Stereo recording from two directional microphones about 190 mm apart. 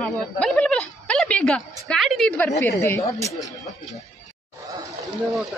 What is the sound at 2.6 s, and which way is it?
Speech, 15° left (ahead or behind).